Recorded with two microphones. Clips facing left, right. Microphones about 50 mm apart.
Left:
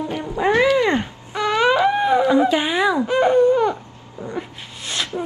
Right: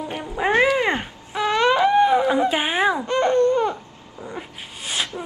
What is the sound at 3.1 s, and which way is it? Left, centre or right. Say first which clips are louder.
Baby cry: left 5 dB; centre.